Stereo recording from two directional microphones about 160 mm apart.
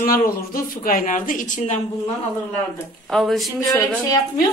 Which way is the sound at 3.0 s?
Centre (ahead or behind).